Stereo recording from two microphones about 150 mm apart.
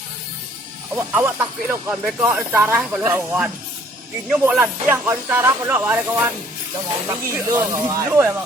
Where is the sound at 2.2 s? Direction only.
15° right (ahead or behind).